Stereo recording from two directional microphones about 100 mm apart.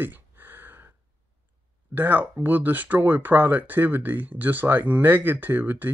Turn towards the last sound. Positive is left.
turn(degrees=-20)  # may be behind; listen again after turning